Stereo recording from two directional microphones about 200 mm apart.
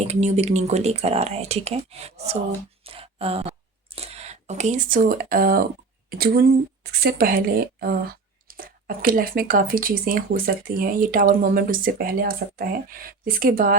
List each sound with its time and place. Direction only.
0.1 s speech: 35° right (ahead or behind)
2.8 s a sound: 30° right (ahead or behind); by 5.6 s 45° right (ahead or behind)
6.1 s speech: 50° right (ahead or behind)